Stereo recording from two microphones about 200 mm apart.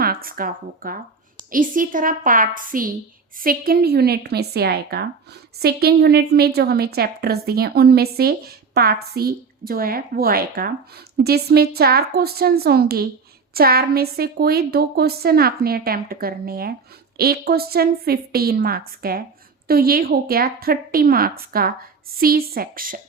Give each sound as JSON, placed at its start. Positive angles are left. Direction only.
{"t": 0.0, "sound": "a woman's voice", "side_deg": -45}